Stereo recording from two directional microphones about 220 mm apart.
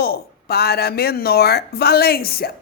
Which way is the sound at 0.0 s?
45° left (ahead or behind).